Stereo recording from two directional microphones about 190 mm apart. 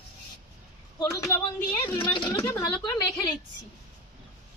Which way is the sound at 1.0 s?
15° left (ahead or behind).